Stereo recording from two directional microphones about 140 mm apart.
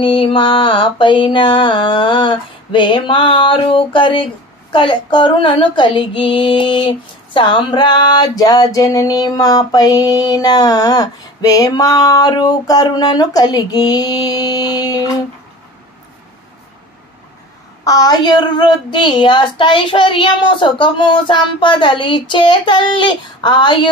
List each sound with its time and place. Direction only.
0.0 s child singing: 35° left (ahead or behind)
4.7 s female singing: 35° left (ahead or behind)
17.8 s child singing: 25° left (ahead or behind)